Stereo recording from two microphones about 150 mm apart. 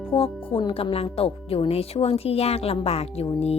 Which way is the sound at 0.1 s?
40° left (ahead or behind).